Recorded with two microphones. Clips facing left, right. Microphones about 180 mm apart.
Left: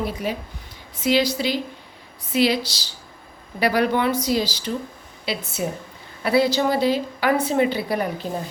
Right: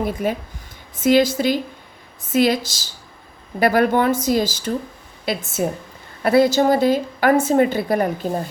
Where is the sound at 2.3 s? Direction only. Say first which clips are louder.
Right 3 dB; 45° right (ahead or behind).